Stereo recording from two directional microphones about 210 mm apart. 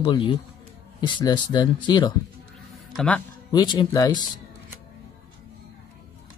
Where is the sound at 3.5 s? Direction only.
20° left (ahead or behind).